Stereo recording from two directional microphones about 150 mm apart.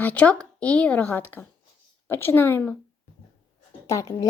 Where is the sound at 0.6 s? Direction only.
10° left (ahead or behind).